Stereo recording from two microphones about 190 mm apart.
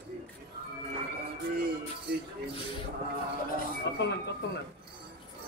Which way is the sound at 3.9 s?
65° left (ahead or behind).